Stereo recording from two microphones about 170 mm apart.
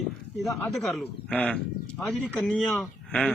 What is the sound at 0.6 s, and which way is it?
A man's voice, centre (ahead or behind).